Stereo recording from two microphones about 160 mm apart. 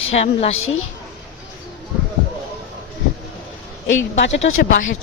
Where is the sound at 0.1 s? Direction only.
40° left (ahead or behind).